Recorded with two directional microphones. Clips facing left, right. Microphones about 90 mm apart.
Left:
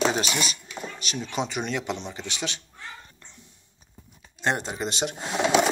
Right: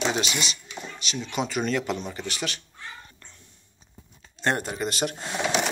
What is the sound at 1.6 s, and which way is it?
Speech, 15° left (ahead or behind).